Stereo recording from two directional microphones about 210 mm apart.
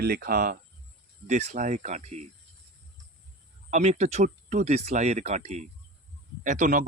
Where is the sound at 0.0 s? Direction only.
45° right (ahead or behind).